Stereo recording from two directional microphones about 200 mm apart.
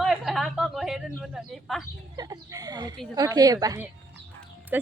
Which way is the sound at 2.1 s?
20° right (ahead or behind).